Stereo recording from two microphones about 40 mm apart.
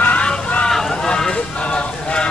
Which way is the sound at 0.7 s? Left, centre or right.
Centre.